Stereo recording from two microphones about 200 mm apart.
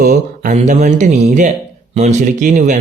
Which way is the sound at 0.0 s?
40° right (ahead or behind).